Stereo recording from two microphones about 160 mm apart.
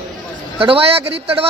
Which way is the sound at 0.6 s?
35° right (ahead or behind).